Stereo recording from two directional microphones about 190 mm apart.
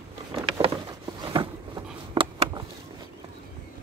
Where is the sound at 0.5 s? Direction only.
20° right (ahead or behind).